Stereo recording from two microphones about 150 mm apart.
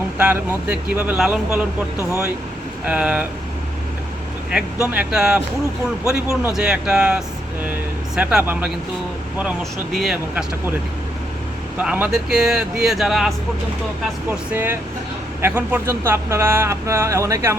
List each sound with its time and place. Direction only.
0.2 s speech: 10° right (ahead or behind)
2.0 s speech: 20° left (ahead or behind)
2.8 s speech: 10° right (ahead or behind)
4.5 s speech: 5° right (ahead or behind)
9.9 s speech: centre (ahead or behind)
11.8 s speech: 10° right (ahead or behind)
14.3 s speech: 15° right (ahead or behind)